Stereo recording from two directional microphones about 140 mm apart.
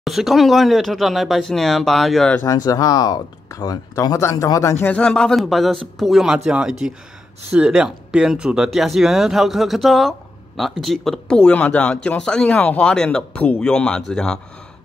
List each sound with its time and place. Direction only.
0.0 s speech: centre (ahead or behind)
2.4 s speech: 25° left (ahead or behind); by 14.4 s 5° left (ahead or behind)